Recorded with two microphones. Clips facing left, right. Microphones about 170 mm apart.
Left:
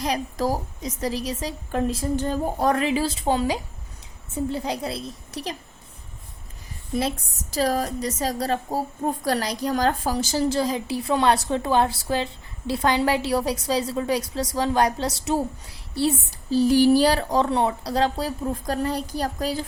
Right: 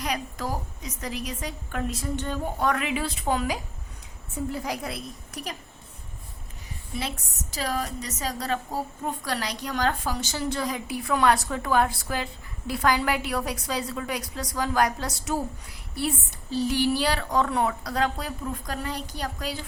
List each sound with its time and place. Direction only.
0.0 s a woman's voice: 35° left (ahead or behind)
7.5 s a woman's voice: 40° left (ahead or behind)